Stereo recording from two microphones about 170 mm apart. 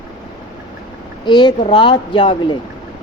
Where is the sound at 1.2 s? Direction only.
25° left (ahead or behind).